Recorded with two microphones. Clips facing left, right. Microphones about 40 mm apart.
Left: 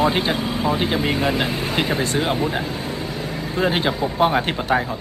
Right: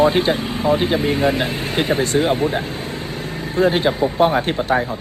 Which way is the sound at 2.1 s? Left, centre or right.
Left.